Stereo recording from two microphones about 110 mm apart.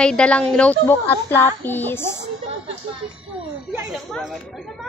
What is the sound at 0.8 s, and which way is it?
A woman's voice, 20° left (ahead or behind).